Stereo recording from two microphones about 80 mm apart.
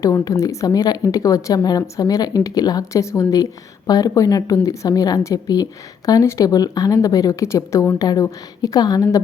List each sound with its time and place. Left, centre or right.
0.0 s a woman's voice: left
7.9 s a woman's voice: left